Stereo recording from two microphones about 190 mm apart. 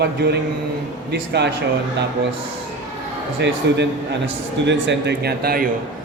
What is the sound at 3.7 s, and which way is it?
A man's voice, 65° right (ahead or behind).